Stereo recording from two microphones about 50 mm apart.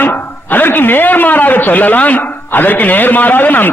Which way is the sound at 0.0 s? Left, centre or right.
Left.